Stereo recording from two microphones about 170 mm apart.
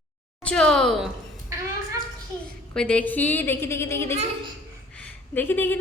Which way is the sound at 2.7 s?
5° left (ahead or behind).